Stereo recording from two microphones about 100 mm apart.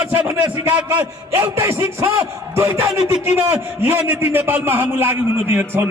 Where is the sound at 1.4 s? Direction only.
25° right (ahead or behind).